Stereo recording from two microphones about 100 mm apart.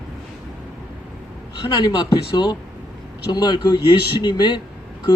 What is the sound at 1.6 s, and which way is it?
A man's voice, 50° left (ahead or behind).